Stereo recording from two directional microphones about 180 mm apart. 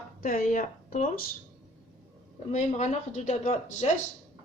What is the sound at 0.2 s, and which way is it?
Speech, 50° left (ahead or behind).